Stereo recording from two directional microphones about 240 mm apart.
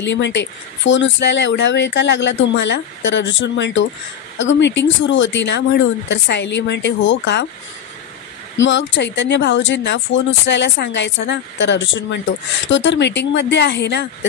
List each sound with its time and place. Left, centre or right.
0.0 s speech: left
8.5 s speech: left